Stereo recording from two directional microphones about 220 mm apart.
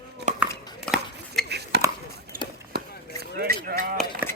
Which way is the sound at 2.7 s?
45° right (ahead or behind).